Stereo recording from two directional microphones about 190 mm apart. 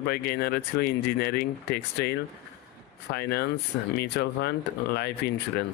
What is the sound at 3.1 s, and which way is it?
Speech, 65° left (ahead or behind).